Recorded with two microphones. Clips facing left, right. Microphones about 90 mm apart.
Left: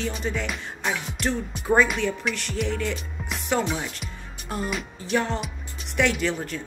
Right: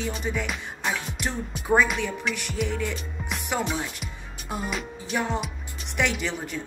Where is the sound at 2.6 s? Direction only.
15° right (ahead or behind).